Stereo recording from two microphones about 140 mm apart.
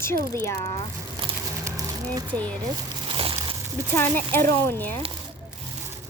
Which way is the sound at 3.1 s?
40° right (ahead or behind).